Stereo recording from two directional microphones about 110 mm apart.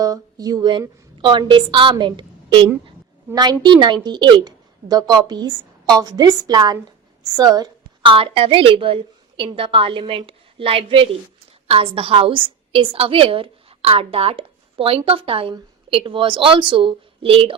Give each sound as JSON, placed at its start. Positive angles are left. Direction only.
{"t": 0.0, "sound": "a woman's voice", "side_deg": -35}
{"t": 7.3, "sound": "a sound", "side_deg": -35}
{"t": 8.1, "sound": "a woman's voice", "side_deg": -60}